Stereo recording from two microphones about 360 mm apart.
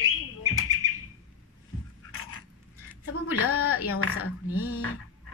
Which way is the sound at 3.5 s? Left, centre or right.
Left.